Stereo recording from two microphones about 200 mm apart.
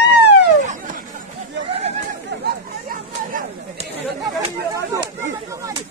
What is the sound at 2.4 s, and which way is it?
Chatter, 45° right (ahead or behind).